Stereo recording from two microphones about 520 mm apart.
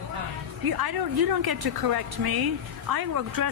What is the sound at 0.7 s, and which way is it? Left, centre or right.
A woman's voice, right.